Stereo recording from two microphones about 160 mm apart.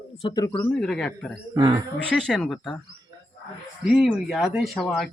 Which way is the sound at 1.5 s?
25° right (ahead or behind).